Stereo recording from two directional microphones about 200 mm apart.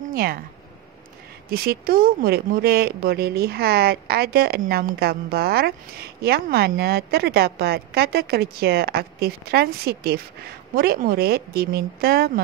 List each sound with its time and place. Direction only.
0.1 s speech: 50° right (ahead or behind)
1.5 s speech: 50° right (ahead or behind)